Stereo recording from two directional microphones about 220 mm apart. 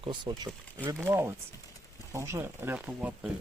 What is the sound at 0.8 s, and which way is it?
Speech, 10° right (ahead or behind).